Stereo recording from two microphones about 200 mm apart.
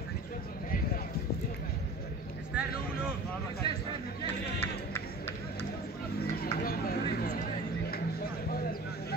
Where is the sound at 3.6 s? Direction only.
30° right (ahead or behind).